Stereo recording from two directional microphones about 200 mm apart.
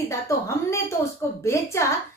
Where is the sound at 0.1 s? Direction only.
15° left (ahead or behind).